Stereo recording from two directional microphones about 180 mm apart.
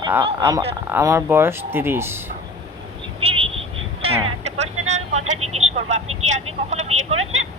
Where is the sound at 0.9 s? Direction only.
15° right (ahead or behind).